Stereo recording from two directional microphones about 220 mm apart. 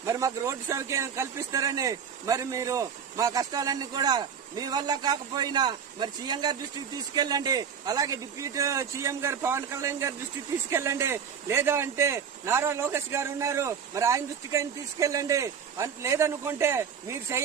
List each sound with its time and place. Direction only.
0.0 s a man's voice: 15° right (ahead or behind)